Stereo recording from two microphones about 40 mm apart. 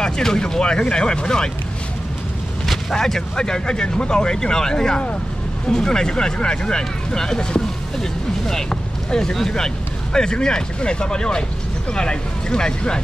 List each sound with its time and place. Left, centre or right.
0.0 s speech: centre
2.6 s speech: centre